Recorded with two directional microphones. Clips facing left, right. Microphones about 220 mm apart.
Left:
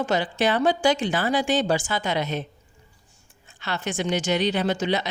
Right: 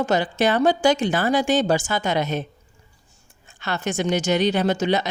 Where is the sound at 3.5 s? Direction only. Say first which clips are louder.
Right 3 dB; 45° right (ahead or behind).